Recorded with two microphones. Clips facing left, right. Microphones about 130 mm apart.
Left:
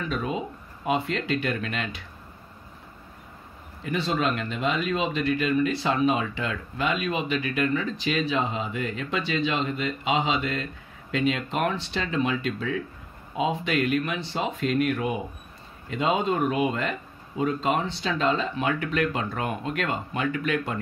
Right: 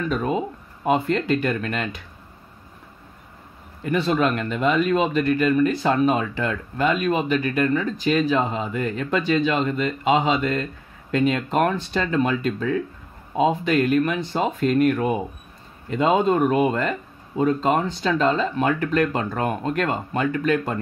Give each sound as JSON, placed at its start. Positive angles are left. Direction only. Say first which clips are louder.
{"t": 0.1, "sound": "speech", "louder": "right 5 dB", "side_deg": -45}
{"t": 3.8, "sound": "speech", "louder": "right 5 dB", "side_deg": -55}